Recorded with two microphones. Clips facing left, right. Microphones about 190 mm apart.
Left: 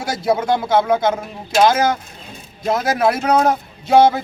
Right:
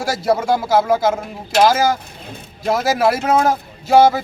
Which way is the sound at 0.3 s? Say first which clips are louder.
Even; 5° right (ahead or behind).